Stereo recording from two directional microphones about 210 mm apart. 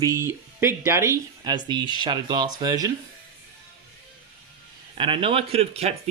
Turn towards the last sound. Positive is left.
turn(degrees=-30)  # may be behind; listen again after turning